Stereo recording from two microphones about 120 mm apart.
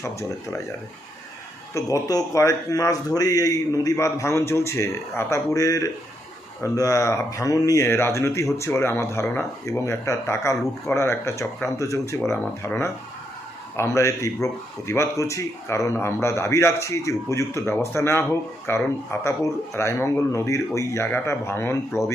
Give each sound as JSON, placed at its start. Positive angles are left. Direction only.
{"t": 0.0, "sound": "speech", "side_deg": 25}
{"t": 1.7, "sound": "speech", "side_deg": 30}